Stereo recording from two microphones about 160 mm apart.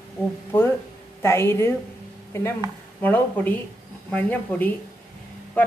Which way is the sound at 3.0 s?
10° left (ahead or behind).